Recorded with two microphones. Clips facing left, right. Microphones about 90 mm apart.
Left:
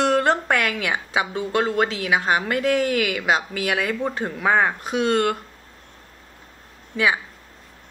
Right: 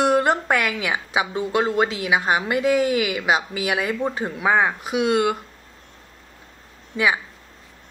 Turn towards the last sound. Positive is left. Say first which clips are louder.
# even
turn(degrees=-20)  # may be behind; listen again after turning